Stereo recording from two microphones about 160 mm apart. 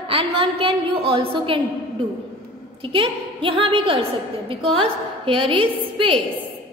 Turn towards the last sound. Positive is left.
turn(degrees=-35)  # may be behind; listen again after turning